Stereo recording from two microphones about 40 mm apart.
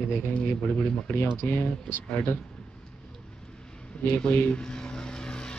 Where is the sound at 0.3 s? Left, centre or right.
Left.